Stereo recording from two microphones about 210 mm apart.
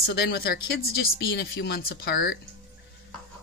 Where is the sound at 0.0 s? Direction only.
50° left (ahead or behind).